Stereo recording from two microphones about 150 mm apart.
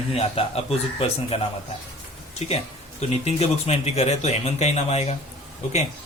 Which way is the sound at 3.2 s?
45° left (ahead or behind).